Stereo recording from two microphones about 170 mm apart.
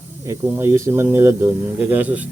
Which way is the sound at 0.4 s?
15° right (ahead or behind).